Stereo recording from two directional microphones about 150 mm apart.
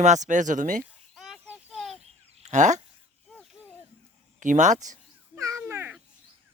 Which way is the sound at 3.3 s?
10° left (ahead or behind).